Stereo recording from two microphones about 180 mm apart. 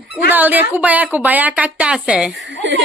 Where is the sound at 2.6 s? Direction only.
90° right.